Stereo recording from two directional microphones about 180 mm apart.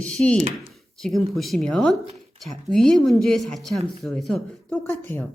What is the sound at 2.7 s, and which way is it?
Speech, centre (ahead or behind).